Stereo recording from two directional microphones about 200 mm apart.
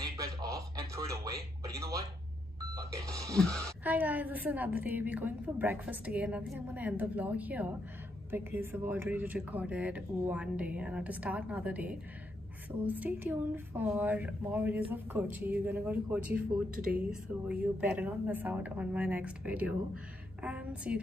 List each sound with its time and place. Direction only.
0.2 s a sound: 15° right (ahead or behind)
2.7 s speech: 15° right (ahead or behind)
16.7 s speech: 50° right (ahead or behind)
17.1 s speech: 5° right (ahead or behind)